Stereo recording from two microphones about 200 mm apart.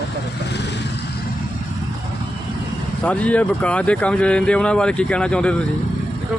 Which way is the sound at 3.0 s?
5° left (ahead or behind).